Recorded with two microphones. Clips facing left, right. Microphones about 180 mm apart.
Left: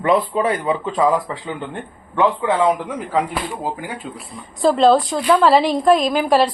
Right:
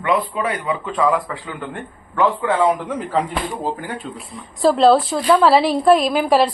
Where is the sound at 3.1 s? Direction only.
10° left (ahead or behind).